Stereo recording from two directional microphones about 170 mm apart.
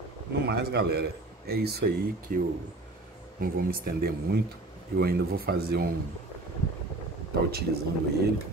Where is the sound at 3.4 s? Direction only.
60° right (ahead or behind).